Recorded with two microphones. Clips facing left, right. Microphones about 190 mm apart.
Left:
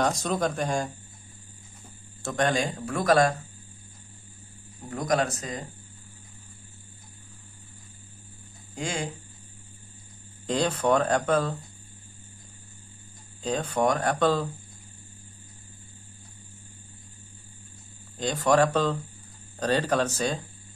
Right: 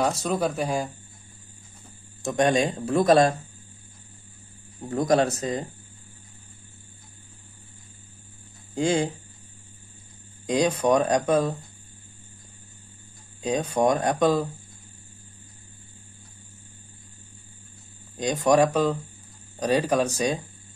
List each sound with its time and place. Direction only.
0.0 s speech: 5° right (ahead or behind)
2.2 s speech: 20° right (ahead or behind)
4.8 s speech: 30° right (ahead or behind)
8.7 s speech: 25° right (ahead or behind)
10.4 s speech: 15° right (ahead or behind)
13.4 s speech: 15° right (ahead or behind)
18.1 s speech: 15° right (ahead or behind)